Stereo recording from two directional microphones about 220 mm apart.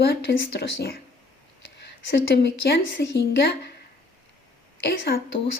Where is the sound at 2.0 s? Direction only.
50° left (ahead or behind).